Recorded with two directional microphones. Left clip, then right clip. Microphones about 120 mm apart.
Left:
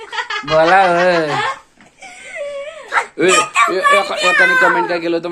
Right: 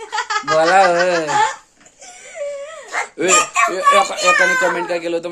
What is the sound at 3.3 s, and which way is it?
Speech, 25° right (ahead or behind).